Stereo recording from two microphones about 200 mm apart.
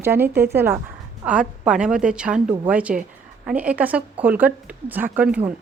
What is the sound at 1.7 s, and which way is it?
A woman's voice, 5° right (ahead or behind).